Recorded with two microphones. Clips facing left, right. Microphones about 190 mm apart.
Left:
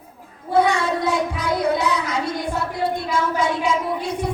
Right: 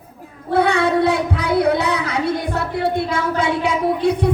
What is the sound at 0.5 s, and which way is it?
Speech, 60° right (ahead or behind).